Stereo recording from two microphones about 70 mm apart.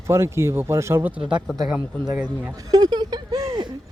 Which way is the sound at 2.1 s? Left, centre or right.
Centre.